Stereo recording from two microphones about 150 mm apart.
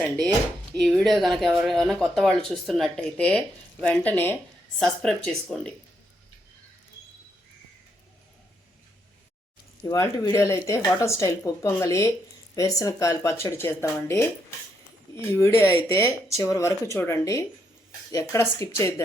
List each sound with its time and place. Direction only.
0.7 s speech: 5° left (ahead or behind)
9.8 s speech: 20° left (ahead or behind)